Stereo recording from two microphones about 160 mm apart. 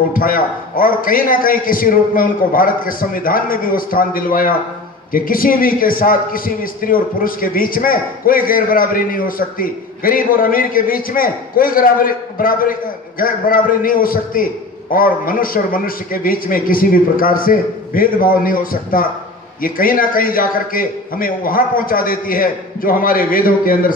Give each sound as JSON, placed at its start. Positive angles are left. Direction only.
{"t": 0.1, "sound": "a man's voice", "side_deg": 60}